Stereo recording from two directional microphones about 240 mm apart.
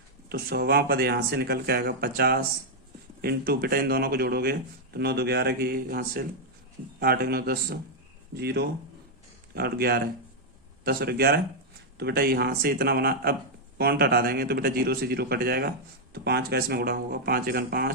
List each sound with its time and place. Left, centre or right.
0.3 s speech: right